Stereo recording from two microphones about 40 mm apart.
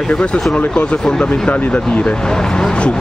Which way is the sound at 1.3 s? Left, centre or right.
Left.